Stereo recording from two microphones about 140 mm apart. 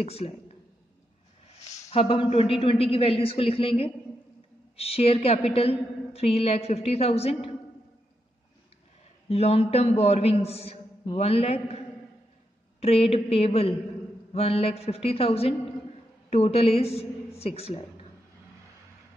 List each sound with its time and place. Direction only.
0.0 s speech: 45° left (ahead or behind)
1.7 s a woman's voice: 45° left (ahead or behind)
9.3 s a woman's voice: 45° left (ahead or behind)
12.8 s a woman's voice: 45° left (ahead or behind)